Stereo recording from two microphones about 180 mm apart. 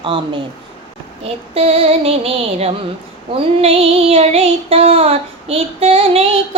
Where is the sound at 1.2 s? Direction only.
35° right (ahead or behind).